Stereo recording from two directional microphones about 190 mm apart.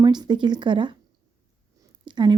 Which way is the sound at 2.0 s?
25° right (ahead or behind).